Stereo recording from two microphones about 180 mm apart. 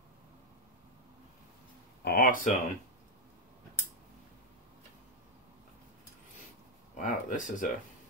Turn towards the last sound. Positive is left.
turn(degrees=45)  # may be behind; listen again after turning